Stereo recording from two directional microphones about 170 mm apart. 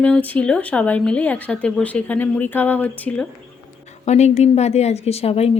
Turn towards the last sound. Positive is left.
turn(degrees=35)  # may be behind; listen again after turning